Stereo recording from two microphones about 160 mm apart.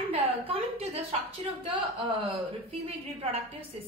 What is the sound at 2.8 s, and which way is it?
Speech, 40° right (ahead or behind).